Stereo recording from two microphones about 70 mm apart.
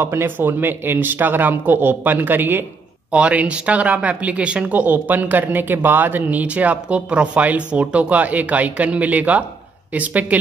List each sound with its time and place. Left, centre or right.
0.0 s speech: right
3.1 s speech: centre